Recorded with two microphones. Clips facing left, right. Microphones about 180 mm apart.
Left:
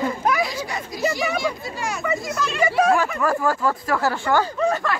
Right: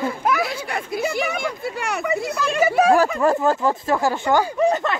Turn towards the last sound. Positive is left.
turn(degrees=-20)  # may be behind; listen again after turning